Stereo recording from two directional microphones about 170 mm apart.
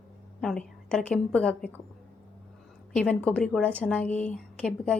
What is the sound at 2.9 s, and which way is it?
A woman's voice, 5° left (ahead or behind).